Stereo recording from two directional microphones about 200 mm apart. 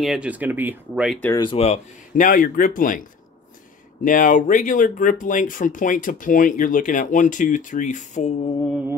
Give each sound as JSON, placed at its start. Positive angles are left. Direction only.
{"t": 0.0, "sound": "speech", "side_deg": -5}
{"t": 1.3, "sound": "speech", "side_deg": 25}